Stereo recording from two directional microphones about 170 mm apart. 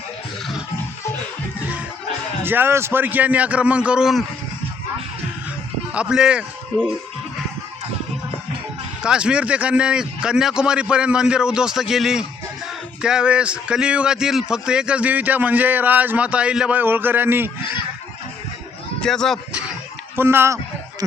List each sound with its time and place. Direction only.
2.4 s a man's voice: 10° right (ahead or behind)
5.9 s a man's voice: 5° right (ahead or behind)
9.0 s a man's voice: 5° right (ahead or behind)
18.9 s speech: 5° left (ahead or behind)
20.1 s a man's voice: 15° right (ahead or behind)
21.0 s a sound: 20° right (ahead or behind)